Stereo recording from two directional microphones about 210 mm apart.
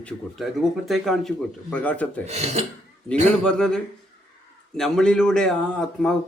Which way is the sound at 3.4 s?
5° left (ahead or behind).